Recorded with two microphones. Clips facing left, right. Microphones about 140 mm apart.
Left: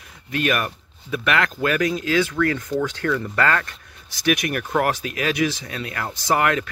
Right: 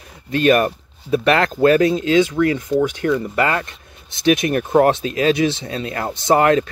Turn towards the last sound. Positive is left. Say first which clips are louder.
# right 6 dB
turn(degrees=-30)  # may be behind; listen again after turning